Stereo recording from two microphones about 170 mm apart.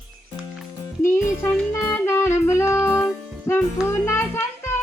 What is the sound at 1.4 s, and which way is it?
Music, 15° left (ahead or behind).